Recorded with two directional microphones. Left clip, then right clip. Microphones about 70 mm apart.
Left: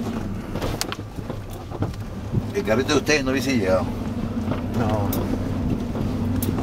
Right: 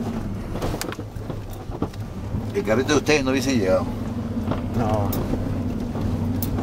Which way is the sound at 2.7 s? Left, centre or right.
Right.